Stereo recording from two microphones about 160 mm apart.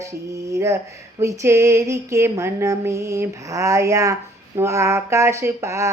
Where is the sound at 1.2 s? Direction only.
20° right (ahead or behind).